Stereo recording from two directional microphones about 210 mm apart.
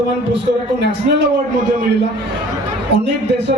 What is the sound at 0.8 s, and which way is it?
Speech, 55° right (ahead or behind).